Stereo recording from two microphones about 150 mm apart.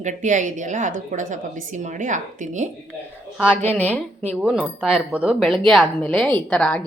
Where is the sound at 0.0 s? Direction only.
55° right (ahead or behind).